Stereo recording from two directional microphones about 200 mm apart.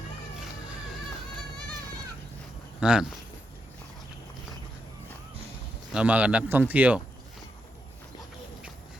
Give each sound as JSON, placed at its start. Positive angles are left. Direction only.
{"t": 2.8, "sound": "speech", "side_deg": -5}
{"t": 5.9, "sound": "speech", "side_deg": -5}